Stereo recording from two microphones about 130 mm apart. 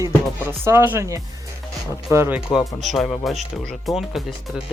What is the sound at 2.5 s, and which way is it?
Speech, centre (ahead or behind).